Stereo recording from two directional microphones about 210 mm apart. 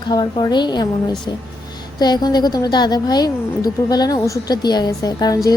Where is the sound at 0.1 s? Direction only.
20° left (ahead or behind).